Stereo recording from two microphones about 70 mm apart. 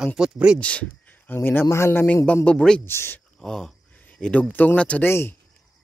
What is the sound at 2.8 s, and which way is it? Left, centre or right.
Speech, left.